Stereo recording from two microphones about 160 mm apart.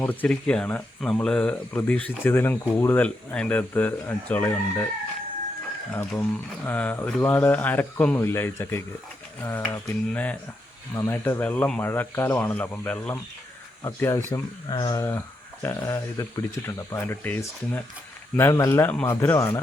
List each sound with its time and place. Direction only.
0.0 s speech: 10° left (ahead or behind)
5.9 s speech: 10° left (ahead or behind)